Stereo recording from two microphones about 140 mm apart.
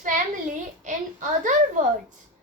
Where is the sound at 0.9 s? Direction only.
65° right (ahead or behind).